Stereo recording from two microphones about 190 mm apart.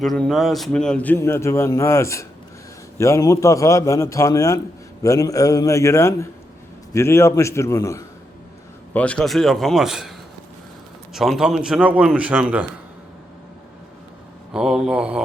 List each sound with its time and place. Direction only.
0.0 s a man's voice: centre (ahead or behind)
14.5 s speech: 5° right (ahead or behind)